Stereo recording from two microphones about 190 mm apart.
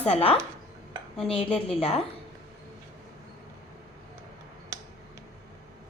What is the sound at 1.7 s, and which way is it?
Speech, 30° left (ahead or behind).